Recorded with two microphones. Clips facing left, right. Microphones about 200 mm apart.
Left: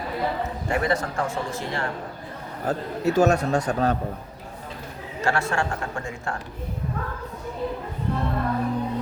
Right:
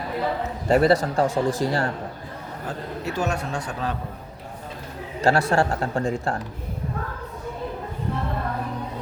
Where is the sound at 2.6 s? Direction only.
40° left (ahead or behind).